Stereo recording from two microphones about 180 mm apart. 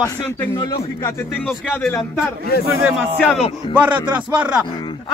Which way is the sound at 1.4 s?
5° left (ahead or behind).